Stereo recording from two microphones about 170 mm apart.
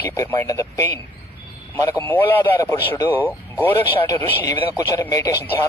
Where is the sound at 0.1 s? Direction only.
15° left (ahead or behind).